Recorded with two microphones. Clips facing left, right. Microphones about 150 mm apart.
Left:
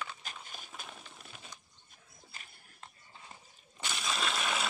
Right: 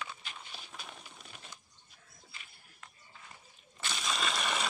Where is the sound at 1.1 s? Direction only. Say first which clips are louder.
Even; centre (ahead or behind).